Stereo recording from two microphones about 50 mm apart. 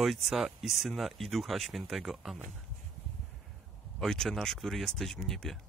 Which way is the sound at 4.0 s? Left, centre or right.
Centre.